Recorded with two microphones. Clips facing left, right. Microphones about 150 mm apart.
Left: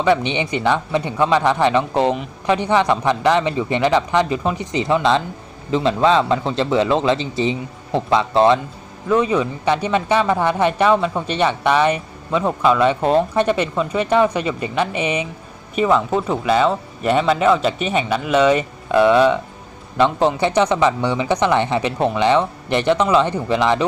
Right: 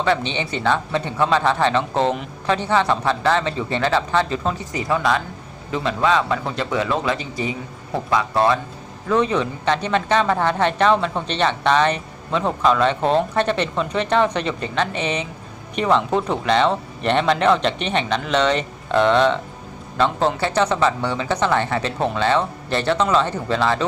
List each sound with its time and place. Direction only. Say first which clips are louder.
0.0 s speech: left 4 dB; 15° left (ahead or behind)
9.0 s speech: left 2 dB; 10° left (ahead or behind)